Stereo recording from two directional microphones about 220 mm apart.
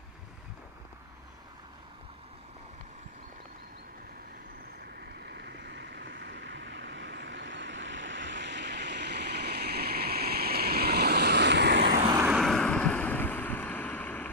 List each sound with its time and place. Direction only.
5.2 s vehicle: 50° right (ahead or behind)
12.1 s vehicle: 10° right (ahead or behind)
12.4 s boat: centre (ahead or behind)